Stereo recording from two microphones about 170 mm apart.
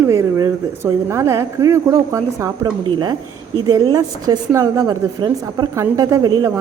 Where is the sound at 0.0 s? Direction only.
15° right (ahead or behind).